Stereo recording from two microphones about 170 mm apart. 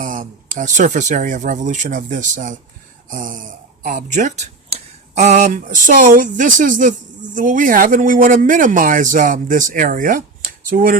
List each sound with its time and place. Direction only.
0.0 s speech: 50° right (ahead or behind)